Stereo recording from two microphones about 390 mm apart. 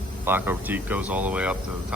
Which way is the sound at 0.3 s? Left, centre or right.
Centre.